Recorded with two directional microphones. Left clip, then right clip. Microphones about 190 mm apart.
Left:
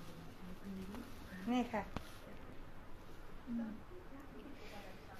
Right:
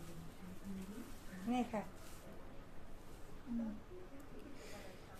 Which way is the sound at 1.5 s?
30° right (ahead or behind).